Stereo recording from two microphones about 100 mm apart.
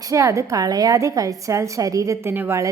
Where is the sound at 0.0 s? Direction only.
30° right (ahead or behind).